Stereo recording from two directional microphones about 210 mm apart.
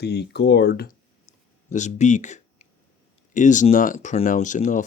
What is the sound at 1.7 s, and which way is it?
Speech, 35° left (ahead or behind).